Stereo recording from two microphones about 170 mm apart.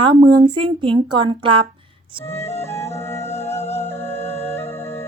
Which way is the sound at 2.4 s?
40° left (ahead or behind).